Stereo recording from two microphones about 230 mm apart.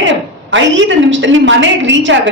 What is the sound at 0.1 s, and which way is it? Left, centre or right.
A woman's voice, right.